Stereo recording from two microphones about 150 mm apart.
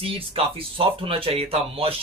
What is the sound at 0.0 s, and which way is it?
Speech, 40° right (ahead or behind).